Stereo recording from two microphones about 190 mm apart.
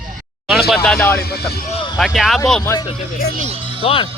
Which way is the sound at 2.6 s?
20° left (ahead or behind).